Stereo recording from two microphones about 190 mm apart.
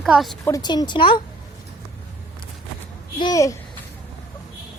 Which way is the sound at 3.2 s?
20° left (ahead or behind).